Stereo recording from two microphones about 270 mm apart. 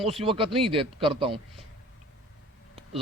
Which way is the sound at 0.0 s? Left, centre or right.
Right.